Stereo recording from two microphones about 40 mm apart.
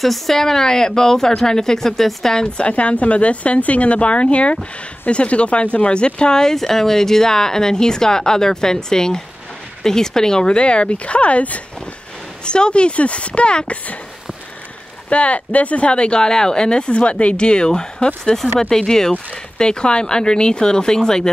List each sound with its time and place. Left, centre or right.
0.0 s speech: centre
2.3 s a woman's voice: left
12.4 s speech: left
15.0 s speech: left; by 21.3 s centre